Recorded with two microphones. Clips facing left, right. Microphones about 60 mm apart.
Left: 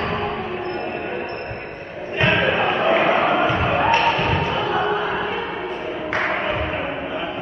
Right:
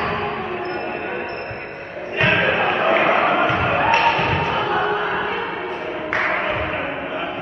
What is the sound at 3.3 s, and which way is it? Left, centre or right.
Music, centre.